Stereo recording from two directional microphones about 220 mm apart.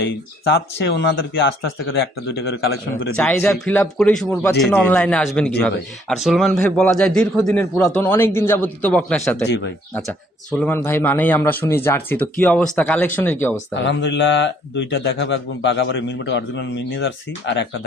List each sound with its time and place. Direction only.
0.0 s a man's voice: 50° left (ahead or behind)
3.2 s a man's voice: 5° left (ahead or behind)
13.7 s a man's voice: 50° left (ahead or behind)